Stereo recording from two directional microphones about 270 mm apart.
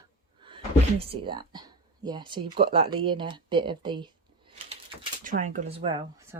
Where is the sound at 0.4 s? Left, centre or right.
Centre.